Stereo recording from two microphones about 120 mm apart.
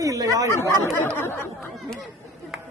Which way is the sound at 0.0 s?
30° right (ahead or behind).